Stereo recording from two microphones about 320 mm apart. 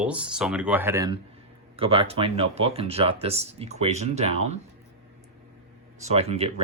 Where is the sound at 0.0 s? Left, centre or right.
Centre.